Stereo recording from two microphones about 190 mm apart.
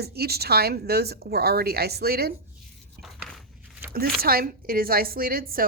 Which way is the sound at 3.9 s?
50° right (ahead or behind).